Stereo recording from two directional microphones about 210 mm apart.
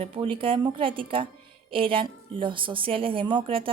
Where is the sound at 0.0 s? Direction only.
25° right (ahead or behind).